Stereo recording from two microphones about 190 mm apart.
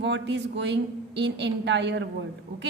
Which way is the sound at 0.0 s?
65° right (ahead or behind).